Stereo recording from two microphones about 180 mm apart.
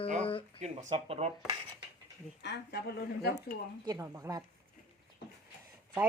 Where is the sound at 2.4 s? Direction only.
70° left (ahead or behind).